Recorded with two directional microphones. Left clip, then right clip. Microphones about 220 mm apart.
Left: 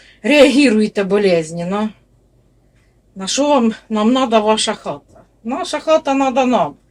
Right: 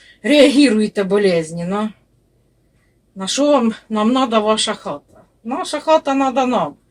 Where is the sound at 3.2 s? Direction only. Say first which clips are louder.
Even; centre (ahead or behind).